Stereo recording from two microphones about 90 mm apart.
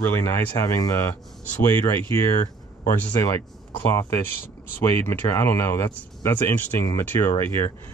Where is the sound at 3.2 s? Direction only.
40° left (ahead or behind).